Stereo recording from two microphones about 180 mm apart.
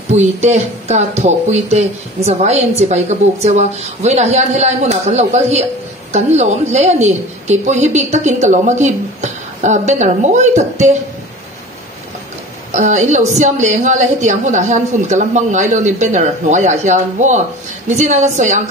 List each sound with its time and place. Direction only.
0.1 s a woman's voice: 40° right (ahead or behind)
12.7 s a woman's voice: 40° right (ahead or behind)